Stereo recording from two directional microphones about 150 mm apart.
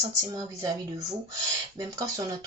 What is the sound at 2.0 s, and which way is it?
Speech, 25° right (ahead or behind).